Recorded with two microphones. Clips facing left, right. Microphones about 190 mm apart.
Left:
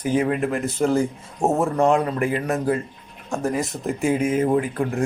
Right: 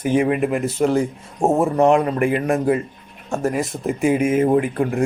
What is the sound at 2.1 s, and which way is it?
Speech, 20° right (ahead or behind).